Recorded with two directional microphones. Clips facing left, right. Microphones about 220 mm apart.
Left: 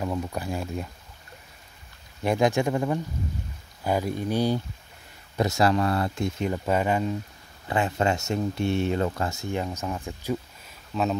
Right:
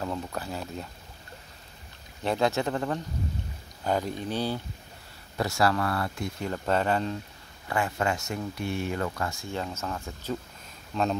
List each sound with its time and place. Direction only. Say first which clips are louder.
0.0 s speech: left 3 dB; 10° left (ahead or behind)
2.2 s speech: left 3 dB; 15° left (ahead or behind)
7.6 s speech: left 3 dB; 20° left (ahead or behind)
10.9 s speech: left 1 dB; 5° left (ahead or behind)